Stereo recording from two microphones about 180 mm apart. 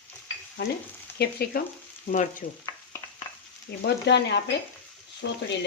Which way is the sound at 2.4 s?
30° left (ahead or behind).